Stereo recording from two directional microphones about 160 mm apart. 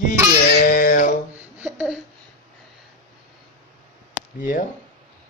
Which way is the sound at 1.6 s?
5° right (ahead or behind).